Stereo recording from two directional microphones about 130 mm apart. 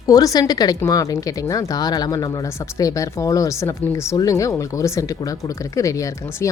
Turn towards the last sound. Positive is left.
turn(degrees=25)  # may be behind; listen again after turning